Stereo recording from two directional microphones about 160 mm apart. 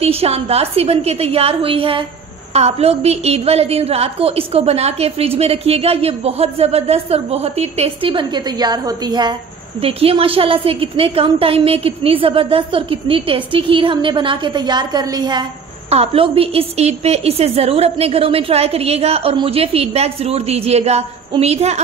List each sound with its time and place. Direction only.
0.0 s a woman's voice: 40° right (ahead or behind)
9.8 s a woman's voice: 35° right (ahead or behind)
15.9 s a woman's voice: 40° right (ahead or behind)